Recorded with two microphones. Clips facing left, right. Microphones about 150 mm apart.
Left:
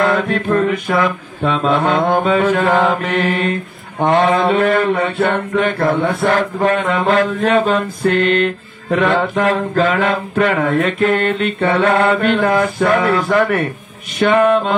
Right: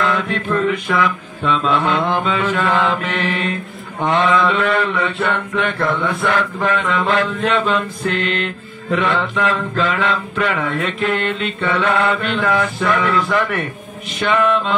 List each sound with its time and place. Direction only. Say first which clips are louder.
0.0 s mantra: left 4 dB; 40° left (ahead or behind)